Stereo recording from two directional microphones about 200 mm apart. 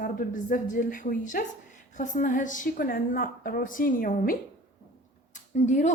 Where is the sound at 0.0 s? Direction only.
45° left (ahead or behind).